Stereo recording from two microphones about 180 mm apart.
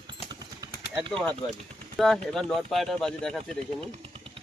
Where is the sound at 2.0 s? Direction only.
Centre (ahead or behind).